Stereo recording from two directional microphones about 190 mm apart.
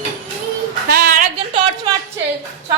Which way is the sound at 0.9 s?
50° right (ahead or behind).